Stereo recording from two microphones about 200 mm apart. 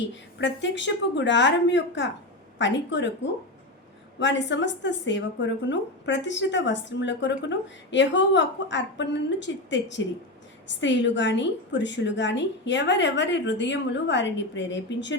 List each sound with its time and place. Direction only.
0.3 s a woman's voice: 65° left (ahead or behind)
4.2 s a woman's voice: 65° left (ahead or behind)